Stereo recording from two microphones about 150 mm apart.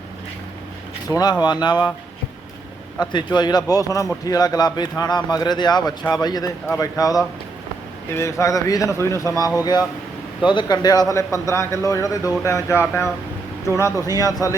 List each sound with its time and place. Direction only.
1.0 s speech: 25° left (ahead or behind)
3.0 s speech: 30° left (ahead or behind)